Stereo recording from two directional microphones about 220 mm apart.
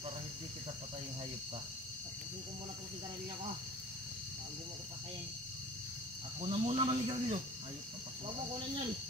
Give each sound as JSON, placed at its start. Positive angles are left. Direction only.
{"t": 6.4, "sound": "a man's voice", "side_deg": -25}